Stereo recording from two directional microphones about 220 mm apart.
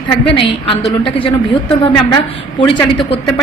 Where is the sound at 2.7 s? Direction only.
20° left (ahead or behind).